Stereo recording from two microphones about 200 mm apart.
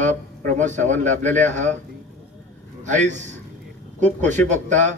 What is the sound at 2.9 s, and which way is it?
Speech, 35° right (ahead or behind).